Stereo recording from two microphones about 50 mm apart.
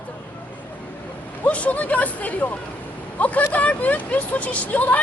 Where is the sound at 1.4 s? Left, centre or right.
Left.